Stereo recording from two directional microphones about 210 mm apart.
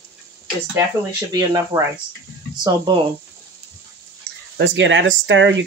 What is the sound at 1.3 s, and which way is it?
Speech, 15° right (ahead or behind).